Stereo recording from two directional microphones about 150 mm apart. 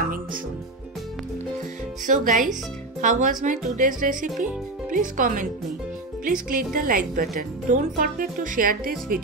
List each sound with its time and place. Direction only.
2.0 s music: 60° right (ahead or behind)
6.2 s a woman's voice: 65° right (ahead or behind)